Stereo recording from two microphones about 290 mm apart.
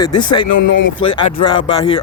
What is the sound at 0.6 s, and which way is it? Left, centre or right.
Speech, left.